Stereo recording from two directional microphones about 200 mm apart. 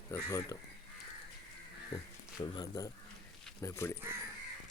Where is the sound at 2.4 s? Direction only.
20° left (ahead or behind).